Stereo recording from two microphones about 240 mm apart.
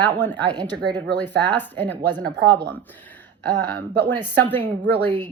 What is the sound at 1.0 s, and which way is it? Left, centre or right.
Speech, centre.